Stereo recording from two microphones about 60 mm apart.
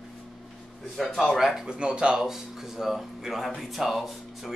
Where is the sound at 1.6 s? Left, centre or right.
Centre.